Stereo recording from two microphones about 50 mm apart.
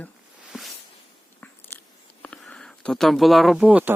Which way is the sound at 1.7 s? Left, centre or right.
Left.